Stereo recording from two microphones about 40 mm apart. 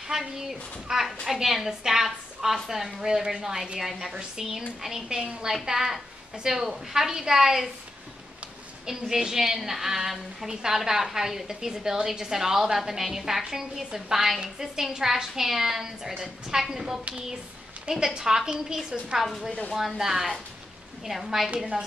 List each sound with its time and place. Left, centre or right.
0.1 s a woman's voice: centre
8.8 s a woman's voice: centre